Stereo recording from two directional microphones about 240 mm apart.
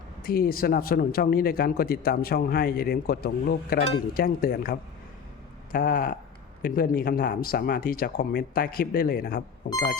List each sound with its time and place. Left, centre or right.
0.2 s speech: left